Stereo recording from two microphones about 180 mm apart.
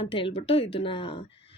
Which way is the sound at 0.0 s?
30° left (ahead or behind).